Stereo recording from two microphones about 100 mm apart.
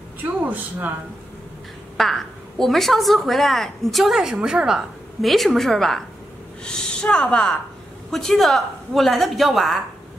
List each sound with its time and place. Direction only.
0.2 s a man's voice: 20° right (ahead or behind)
2.0 s a woman's voice: centre (ahead or behind)